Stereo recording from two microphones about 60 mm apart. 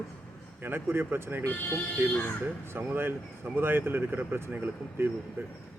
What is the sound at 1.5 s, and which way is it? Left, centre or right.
Speech, left.